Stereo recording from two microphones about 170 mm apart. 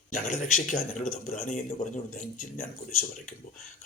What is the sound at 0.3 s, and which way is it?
Speech, 50° left (ahead or behind).